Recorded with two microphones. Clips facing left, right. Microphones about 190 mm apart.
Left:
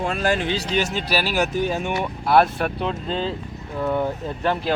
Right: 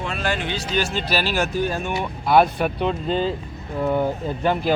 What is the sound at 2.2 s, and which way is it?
Speech, centre (ahead or behind).